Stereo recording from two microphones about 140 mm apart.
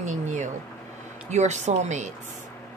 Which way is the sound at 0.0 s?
60° right (ahead or behind).